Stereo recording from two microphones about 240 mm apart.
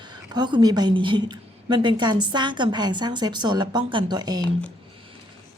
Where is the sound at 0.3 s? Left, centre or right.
Centre.